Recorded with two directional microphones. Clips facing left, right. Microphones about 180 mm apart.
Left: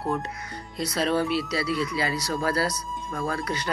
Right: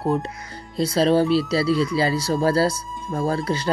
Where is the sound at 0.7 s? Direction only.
30° right (ahead or behind).